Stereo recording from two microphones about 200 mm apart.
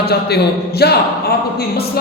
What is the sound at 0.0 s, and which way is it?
Speech, 55° left (ahead or behind).